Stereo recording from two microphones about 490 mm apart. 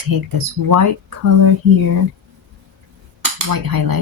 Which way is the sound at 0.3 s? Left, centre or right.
Right.